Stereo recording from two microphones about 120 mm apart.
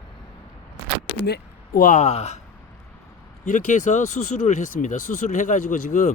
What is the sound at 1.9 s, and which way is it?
Speech, 75° left (ahead or behind).